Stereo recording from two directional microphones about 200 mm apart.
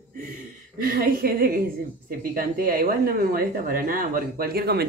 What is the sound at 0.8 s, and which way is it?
Speech, 45° right (ahead or behind).